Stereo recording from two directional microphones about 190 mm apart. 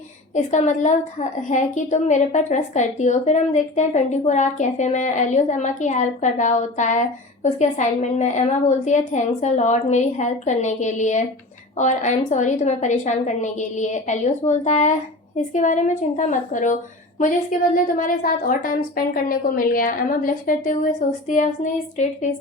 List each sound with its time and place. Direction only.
0.3 s a woman's voice: 40° left (ahead or behind)
17.8 s a woman's voice: 45° left (ahead or behind)